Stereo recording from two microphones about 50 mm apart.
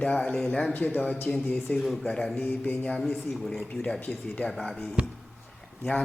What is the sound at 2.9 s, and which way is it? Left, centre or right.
Speech, centre.